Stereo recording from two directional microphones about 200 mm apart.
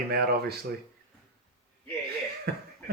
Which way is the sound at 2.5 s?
50° right (ahead or behind).